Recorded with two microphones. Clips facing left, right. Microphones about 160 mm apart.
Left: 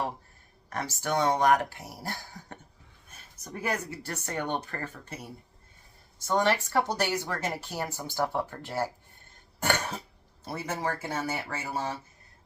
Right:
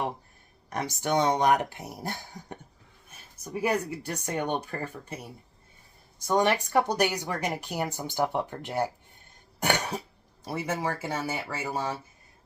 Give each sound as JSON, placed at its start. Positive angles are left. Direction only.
{"t": 0.7, "sound": "speech", "side_deg": -20}
{"t": 6.2, "sound": "speech", "side_deg": -15}
{"t": 9.6, "sound": "cough", "side_deg": -15}
{"t": 10.4, "sound": "speech", "side_deg": -10}